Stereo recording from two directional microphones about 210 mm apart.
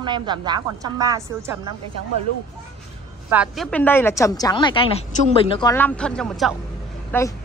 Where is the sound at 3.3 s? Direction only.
Centre (ahead or behind); by 5.7 s 20° left (ahead or behind).